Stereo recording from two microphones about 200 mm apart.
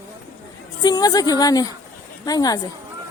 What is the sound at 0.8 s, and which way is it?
Speech, 20° left (ahead or behind).